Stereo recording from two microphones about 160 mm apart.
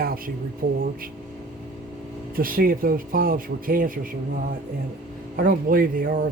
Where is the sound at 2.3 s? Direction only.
65° right (ahead or behind).